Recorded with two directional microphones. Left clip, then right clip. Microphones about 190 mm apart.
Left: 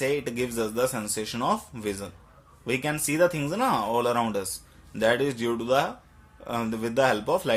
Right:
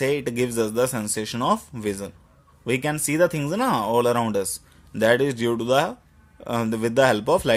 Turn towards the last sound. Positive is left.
turn(degrees=-50)  # may be behind; listen again after turning